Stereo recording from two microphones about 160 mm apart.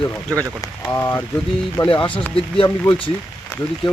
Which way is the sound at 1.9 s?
30° left (ahead or behind).